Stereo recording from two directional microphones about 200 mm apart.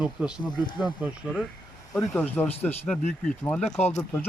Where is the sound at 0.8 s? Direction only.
5° right (ahead or behind).